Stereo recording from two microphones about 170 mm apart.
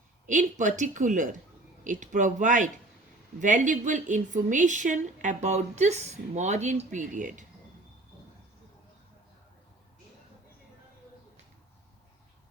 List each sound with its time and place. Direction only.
0.3 s a woman's voice: 45° right (ahead or behind)